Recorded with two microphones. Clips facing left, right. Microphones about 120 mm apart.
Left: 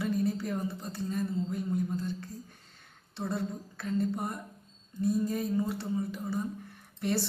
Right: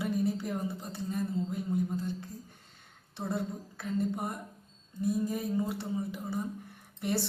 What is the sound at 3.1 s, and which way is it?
A woman's voice, 15° right (ahead or behind).